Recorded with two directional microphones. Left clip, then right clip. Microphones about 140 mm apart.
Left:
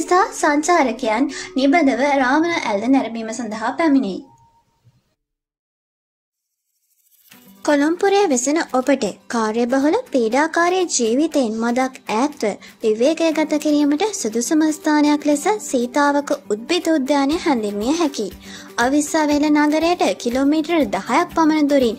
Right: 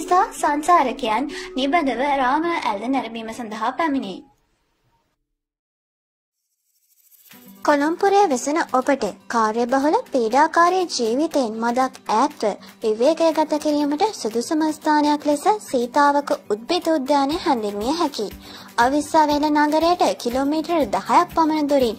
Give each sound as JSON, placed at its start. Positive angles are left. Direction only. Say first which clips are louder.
{"t": 0.1, "sound": "speech", "louder": "left 2 dB", "side_deg": -15}
{"t": 0.7, "sound": "a woman's voice", "louder": "even", "side_deg": -35}
{"t": 7.6, "sound": "speech", "louder": "left 1 dB", "side_deg": -10}